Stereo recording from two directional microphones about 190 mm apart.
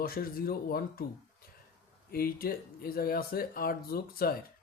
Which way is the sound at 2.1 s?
50° left (ahead or behind).